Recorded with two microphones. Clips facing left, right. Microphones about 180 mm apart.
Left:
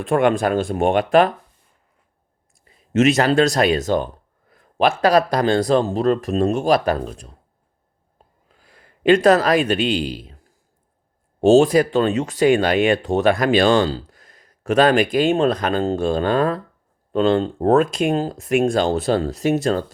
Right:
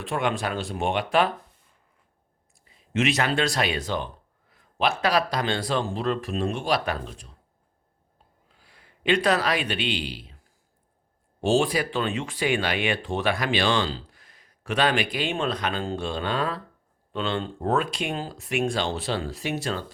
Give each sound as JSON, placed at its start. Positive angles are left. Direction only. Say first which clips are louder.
{"t": 0.0, "sound": "speech", "louder": "left 10 dB", "side_deg": 50}
{"t": 2.9, "sound": "speech", "louder": "left 9 dB", "side_deg": 45}
{"t": 8.4, "sound": "a man's voice", "louder": "left 5 dB", "side_deg": 45}
{"t": 11.3, "sound": "speech", "louder": "left 10 dB", "side_deg": 45}